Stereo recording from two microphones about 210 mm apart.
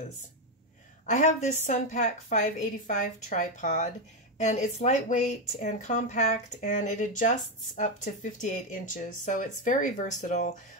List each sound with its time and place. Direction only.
1.0 s speech: 35° left (ahead or behind)